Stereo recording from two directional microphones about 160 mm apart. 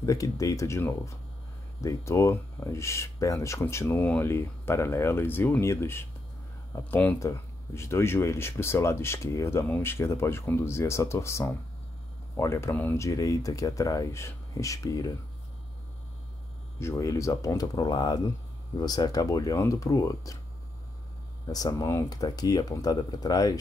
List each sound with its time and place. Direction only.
0.0 s speech: 20° left (ahead or behind)
16.8 s speech: 20° left (ahead or behind)
21.5 s speech: 25° left (ahead or behind)